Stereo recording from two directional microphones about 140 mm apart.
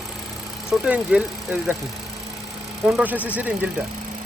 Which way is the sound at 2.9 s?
10° right (ahead or behind).